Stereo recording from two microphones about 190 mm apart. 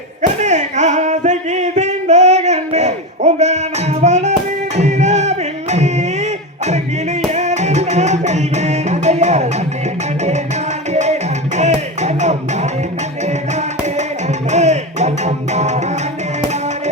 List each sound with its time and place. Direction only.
0.2 s a sound: 40° right (ahead or behind)
4.0 s music: 40° right (ahead or behind)
7.3 s music: 35° right (ahead or behind)
10.9 s music: 35° right (ahead or behind)
14.5 s music: 35° right (ahead or behind)